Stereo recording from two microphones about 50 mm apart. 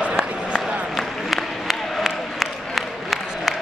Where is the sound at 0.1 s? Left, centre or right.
Centre.